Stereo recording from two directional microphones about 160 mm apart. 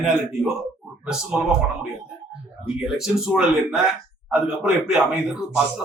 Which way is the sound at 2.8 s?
5° right (ahead or behind).